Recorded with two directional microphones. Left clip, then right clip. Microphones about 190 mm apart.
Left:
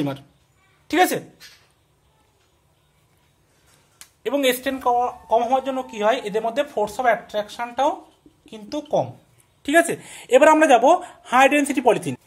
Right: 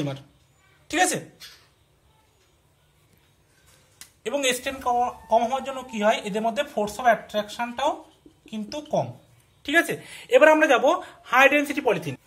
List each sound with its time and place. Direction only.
0.8 s speech: 50° left (ahead or behind)
4.2 s speech: 45° left (ahead or behind)
9.6 s speech: 50° left (ahead or behind)